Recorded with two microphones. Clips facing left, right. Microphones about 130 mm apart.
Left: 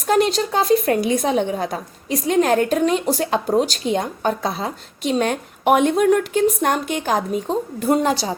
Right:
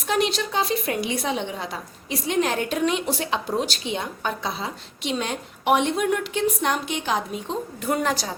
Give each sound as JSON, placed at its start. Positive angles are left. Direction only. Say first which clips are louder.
{"t": 0.1, "sound": "a woman's voice", "louder": "left 6 dB", "side_deg": 45}